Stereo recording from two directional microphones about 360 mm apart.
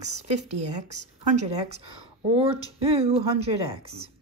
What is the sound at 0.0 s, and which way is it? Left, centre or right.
Speech, centre.